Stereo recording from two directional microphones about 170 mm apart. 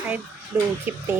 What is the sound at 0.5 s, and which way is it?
Speech, 20° right (ahead or behind).